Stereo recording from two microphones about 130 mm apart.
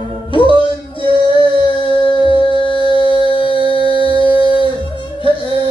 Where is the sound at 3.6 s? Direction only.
40° right (ahead or behind).